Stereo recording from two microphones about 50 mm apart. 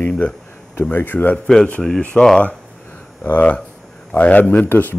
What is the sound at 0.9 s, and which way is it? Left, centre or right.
Speech, left.